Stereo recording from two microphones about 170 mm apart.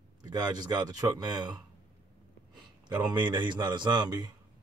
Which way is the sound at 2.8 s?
25° right (ahead or behind).